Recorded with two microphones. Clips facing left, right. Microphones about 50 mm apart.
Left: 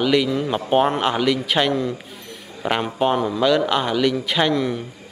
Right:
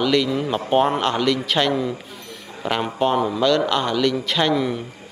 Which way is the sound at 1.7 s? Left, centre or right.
Centre.